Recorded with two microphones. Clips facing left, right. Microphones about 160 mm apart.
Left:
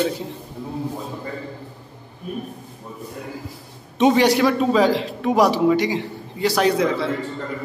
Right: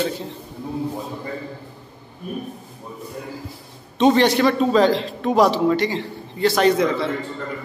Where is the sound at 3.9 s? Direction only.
10° left (ahead or behind).